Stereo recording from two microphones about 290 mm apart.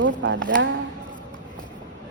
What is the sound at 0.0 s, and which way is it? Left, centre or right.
Speech, right.